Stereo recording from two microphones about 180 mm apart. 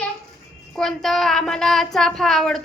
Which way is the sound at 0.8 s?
Centre (ahead or behind).